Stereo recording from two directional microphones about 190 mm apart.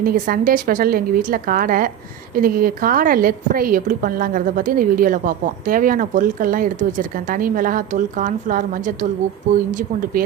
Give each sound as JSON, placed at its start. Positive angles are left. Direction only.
{"t": 0.0, "sound": "a woman's voice", "side_deg": -50}